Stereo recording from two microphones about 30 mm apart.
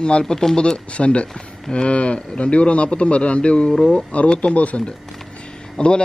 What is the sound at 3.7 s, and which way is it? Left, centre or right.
Speech, left.